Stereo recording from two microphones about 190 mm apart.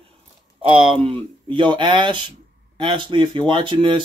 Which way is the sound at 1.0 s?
25° right (ahead or behind).